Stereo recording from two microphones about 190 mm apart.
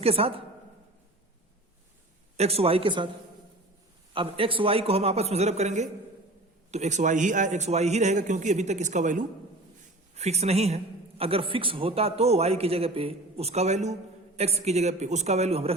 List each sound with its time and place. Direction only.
0.0 s a man's voice: 30° right (ahead or behind)
2.3 s a man's voice: 35° right (ahead or behind)
4.1 s a man's voice: 25° right (ahead or behind)